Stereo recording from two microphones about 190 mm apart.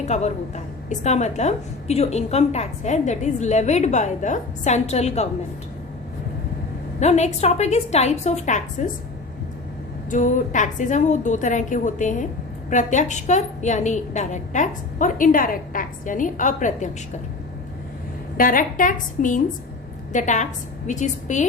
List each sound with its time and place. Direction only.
0.0 s a woman's voice: 35° left (ahead or behind)
7.0 s a woman's voice: 35° left (ahead or behind)
10.1 s a woman's voice: 40° left (ahead or behind)
18.3 s a woman's voice: 45° left (ahead or behind)